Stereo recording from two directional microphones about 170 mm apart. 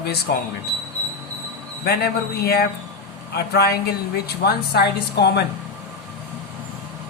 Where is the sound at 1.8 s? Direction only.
70° left (ahead or behind).